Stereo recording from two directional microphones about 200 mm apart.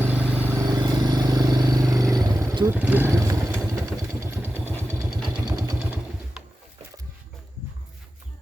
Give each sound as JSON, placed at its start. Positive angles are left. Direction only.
{"t": 0.0, "sound": "vehicle", "side_deg": -5}
{"t": 5.5, "sound": "vehicle", "side_deg": -15}